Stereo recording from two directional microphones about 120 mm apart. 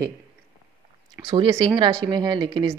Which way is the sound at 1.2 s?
45° right (ahead or behind).